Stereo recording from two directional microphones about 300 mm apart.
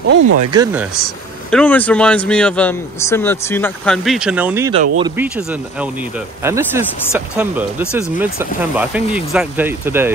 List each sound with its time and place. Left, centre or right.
0.5 s speech: centre
1.5 s speech: centre
4.7 s speech: centre
5.1 s speech: centre